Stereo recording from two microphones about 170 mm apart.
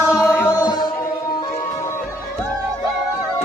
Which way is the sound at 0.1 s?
20° left (ahead or behind).